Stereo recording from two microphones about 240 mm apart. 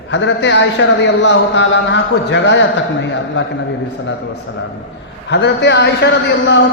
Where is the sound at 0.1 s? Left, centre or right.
Left.